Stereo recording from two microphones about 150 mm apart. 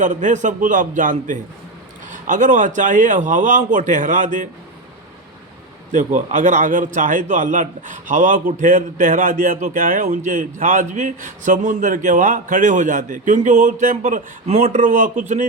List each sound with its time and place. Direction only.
0.0 s a man's voice: 55° right (ahead or behind)
5.9 s a man's voice: 55° right (ahead or behind)